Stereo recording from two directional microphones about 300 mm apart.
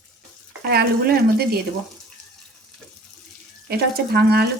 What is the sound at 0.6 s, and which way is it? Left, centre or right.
Speech, right.